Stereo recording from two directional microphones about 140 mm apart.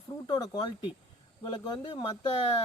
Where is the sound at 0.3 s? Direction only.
30° left (ahead or behind).